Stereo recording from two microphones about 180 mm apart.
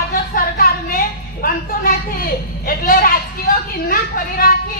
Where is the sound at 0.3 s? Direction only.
55° left (ahead or behind).